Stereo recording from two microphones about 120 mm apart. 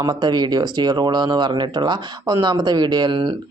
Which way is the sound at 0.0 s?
35° right (ahead or behind).